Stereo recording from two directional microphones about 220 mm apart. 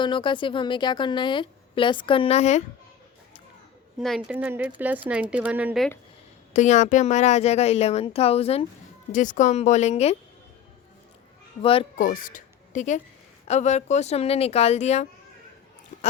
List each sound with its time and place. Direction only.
0.0 s a woman's voice: 20° left (ahead or behind)
4.0 s a woman's voice: 5° right (ahead or behind)
6.5 s a woman's voice: 35° left (ahead or behind)
11.6 s a woman's voice: 25° left (ahead or behind)
11.9 s a woman's voice: 40° left (ahead or behind)
15.9 s a sound: 35° left (ahead or behind)